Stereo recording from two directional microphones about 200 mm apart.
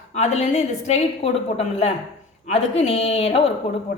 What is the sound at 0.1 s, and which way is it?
A woman's voice, 35° left (ahead or behind).